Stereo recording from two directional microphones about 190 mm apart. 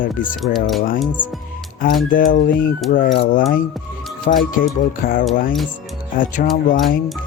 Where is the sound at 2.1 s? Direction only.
45° left (ahead or behind).